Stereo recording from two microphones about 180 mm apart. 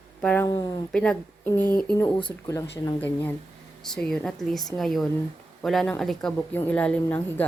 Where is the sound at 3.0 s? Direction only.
10° left (ahead or behind).